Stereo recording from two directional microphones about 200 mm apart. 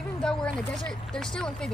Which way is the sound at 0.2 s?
5° left (ahead or behind).